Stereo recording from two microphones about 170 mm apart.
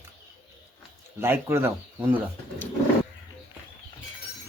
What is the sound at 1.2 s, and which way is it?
Speech, 15° right (ahead or behind).